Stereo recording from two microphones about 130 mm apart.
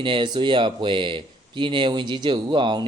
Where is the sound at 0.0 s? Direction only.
40° right (ahead or behind).